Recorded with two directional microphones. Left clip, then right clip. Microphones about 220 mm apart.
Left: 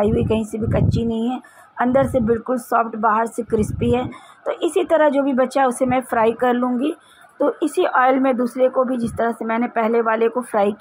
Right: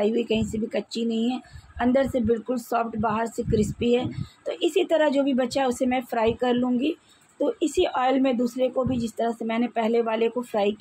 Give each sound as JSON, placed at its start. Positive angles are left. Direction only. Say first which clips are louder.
{"t": 0.0, "sound": "a woman's voice", "louder": "left 5 dB", "side_deg": 10}